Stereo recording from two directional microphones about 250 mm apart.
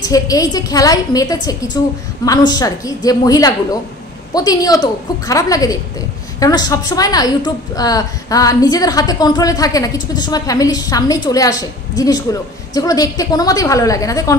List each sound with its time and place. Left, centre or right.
0.0 s a woman's voice: centre